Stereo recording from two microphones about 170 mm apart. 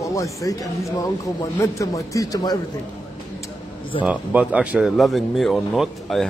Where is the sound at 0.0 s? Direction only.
20° left (ahead or behind).